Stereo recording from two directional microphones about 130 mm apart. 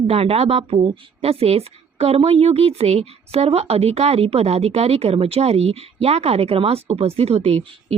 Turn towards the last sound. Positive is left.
turn(degrees=-50)  # may be behind; listen again after turning